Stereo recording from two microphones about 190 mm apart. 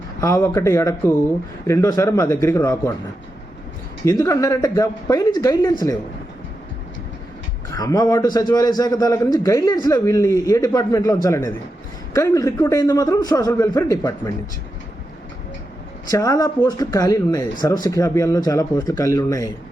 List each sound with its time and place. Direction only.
0.2 s a man's voice: 15° left (ahead or behind)
4.0 s a man's voice: 20° left (ahead or behind)
7.7 s a man's voice: 20° left (ahead or behind)
16.0 s a man's voice: 20° left (ahead or behind)